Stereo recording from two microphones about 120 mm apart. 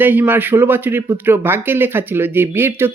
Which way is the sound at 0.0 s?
15° right (ahead or behind).